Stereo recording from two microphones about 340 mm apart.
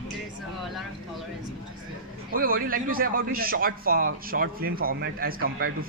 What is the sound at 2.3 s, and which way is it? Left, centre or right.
Speech, right.